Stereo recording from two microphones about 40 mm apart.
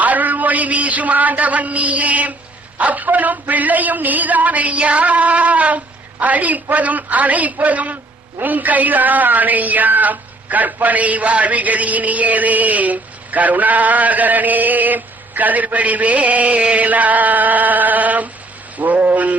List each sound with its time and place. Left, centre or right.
0.0 s a man's voice: right
2.7 s music: right
8.4 s speech: right
10.8 s music: right
18.8 s a sound: right